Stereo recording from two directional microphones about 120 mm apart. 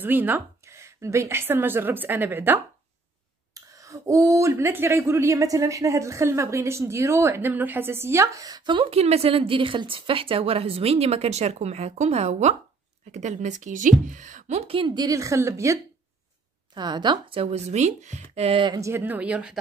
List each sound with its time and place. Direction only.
0.0 s a woman's voice: 15° right (ahead or behind)
3.5 s speech: 30° right (ahead or behind)
8.7 s a woman's voice: 60° right (ahead or behind)
14.8 s a woman's voice: 40° right (ahead or behind)
15.0 s speech: 25° right (ahead or behind)
16.7 s a woman's voice: 35° right (ahead or behind)
17.4 s a woman's voice: 60° right (ahead or behind)
18.7 s speech: 25° right (ahead or behind); by 19.6 s 10° right (ahead or behind)